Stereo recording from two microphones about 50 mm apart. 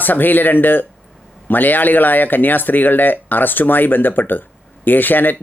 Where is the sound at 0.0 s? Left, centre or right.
Left.